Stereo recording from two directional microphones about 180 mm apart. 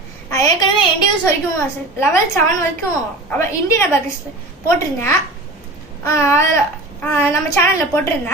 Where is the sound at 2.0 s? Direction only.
15° left (ahead or behind).